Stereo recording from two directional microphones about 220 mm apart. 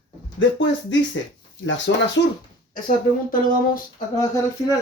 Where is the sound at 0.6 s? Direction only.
55° left (ahead or behind).